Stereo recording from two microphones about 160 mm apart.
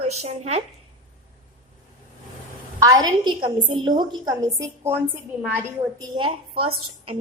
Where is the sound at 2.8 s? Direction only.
25° right (ahead or behind).